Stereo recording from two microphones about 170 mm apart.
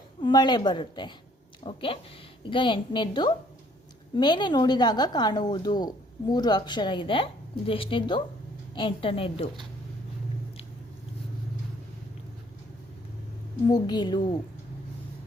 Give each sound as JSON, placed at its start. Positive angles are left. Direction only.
{"t": 0.2, "sound": "a woman's voice", "side_deg": 25}
{"t": 13.7, "sound": "a woman's voice", "side_deg": 25}